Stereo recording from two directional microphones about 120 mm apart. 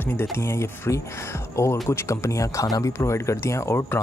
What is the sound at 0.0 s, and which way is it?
Speech, 20° left (ahead or behind).